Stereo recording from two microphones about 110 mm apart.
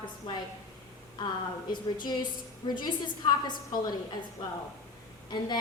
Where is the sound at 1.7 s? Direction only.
40° left (ahead or behind).